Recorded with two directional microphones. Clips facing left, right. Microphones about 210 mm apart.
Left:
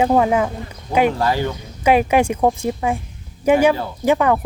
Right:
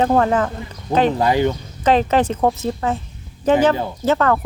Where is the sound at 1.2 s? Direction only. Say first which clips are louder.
Right 3 dB; 20° right (ahead or behind).